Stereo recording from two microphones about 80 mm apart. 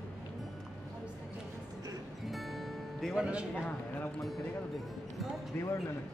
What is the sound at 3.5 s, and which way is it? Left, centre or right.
Speech, centre.